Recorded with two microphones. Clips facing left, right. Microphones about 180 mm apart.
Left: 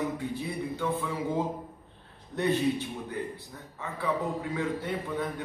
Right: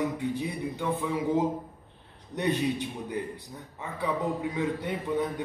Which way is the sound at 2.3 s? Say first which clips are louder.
Left 1 dB; 15° right (ahead or behind).